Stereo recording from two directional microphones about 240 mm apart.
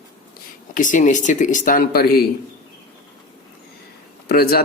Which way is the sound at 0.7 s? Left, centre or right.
Left.